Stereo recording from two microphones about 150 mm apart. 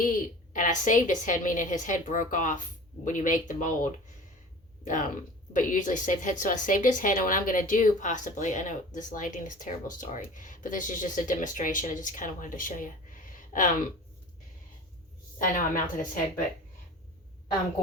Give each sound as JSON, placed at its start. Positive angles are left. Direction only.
{"t": 0.5, "sound": "speech", "side_deg": 60}
{"t": 15.4, "sound": "speech", "side_deg": 65}